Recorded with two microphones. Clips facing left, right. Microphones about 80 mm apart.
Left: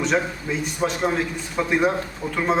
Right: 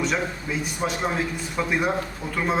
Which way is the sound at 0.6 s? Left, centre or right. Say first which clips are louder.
Left 4 dB; centre.